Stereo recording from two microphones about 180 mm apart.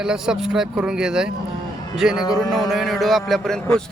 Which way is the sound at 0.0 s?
5° right (ahead or behind).